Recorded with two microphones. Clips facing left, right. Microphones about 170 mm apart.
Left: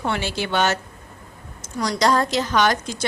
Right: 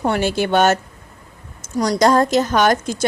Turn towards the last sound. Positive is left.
turn(degrees=-50)  # may be behind; listen again after turning